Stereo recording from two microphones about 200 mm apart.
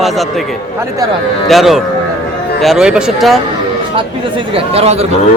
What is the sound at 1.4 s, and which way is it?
A man's voice, centre (ahead or behind).